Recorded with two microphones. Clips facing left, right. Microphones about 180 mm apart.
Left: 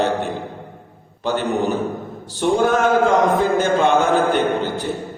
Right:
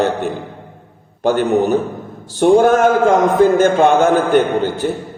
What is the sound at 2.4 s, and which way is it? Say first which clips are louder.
A man's voice: right 6 dB; 50° right (ahead or behind).